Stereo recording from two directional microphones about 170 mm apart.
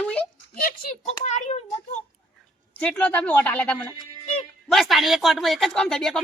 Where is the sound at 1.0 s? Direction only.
40° left (ahead or behind).